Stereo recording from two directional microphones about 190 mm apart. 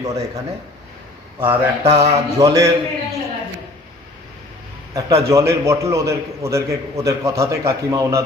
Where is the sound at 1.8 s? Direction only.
30° right (ahead or behind).